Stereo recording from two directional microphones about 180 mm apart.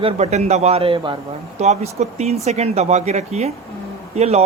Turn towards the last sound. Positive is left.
turn(degrees=-35)  # may be behind; listen again after turning